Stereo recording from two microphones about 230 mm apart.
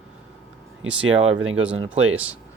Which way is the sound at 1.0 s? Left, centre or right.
Right.